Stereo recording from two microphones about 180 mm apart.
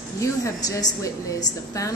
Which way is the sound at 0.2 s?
20° left (ahead or behind).